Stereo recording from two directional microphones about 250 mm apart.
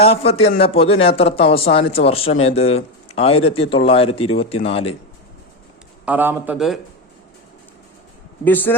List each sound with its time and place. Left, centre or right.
0.0 s a man's voice: left
6.1 s a man's voice: centre
8.4 s a man's voice: centre